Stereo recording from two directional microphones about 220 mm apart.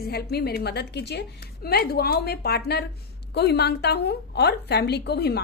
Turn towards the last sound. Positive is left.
turn(degrees=50)  # may be behind; listen again after turning